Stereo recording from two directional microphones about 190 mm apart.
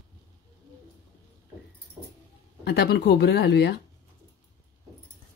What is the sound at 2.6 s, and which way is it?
Speech, 60° left (ahead or behind).